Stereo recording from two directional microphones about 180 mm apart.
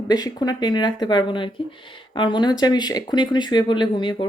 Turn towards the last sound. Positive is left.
turn(degrees=25)  # may be behind; listen again after turning